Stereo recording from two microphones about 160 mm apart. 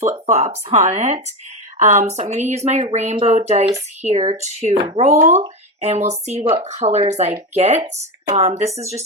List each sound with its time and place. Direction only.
0.0 s speech: 45° right (ahead or behind)